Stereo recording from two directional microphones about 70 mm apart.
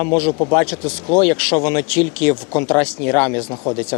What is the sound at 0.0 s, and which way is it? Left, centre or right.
Speech, left.